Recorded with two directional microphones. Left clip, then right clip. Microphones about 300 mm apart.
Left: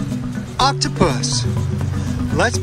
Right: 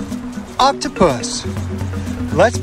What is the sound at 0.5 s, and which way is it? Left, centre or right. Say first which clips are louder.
Speech: right 3 dB; centre.